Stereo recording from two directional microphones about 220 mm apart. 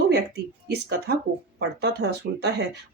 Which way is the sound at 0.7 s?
45° right (ahead or behind).